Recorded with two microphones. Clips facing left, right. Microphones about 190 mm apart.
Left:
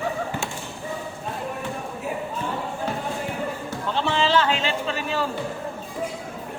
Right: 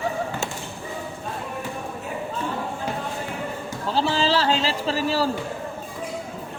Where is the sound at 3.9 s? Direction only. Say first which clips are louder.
Right 1 dB; 35° right (ahead or behind).